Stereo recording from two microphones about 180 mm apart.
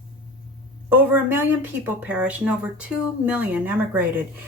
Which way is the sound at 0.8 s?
10° right (ahead or behind).